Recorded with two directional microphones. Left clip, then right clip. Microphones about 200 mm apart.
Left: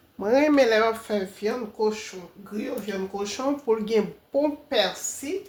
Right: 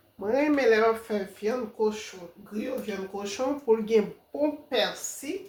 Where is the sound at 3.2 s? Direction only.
35° left (ahead or behind).